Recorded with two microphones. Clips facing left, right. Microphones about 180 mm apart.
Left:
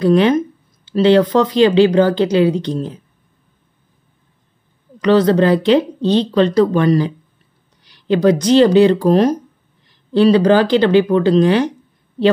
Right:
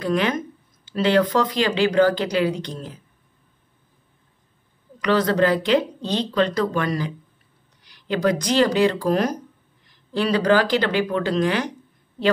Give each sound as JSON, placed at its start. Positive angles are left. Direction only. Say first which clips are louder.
{"t": 0.0, "sound": "speech", "louder": "left 10 dB", "side_deg": 30}
{"t": 5.0, "sound": "speech", "louder": "left 7 dB", "side_deg": 30}
{"t": 8.1, "sound": "speech", "louder": "left 9 dB", "side_deg": 30}